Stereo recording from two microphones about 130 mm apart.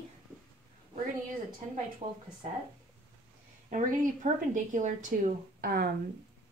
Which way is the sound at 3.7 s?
75° right (ahead or behind).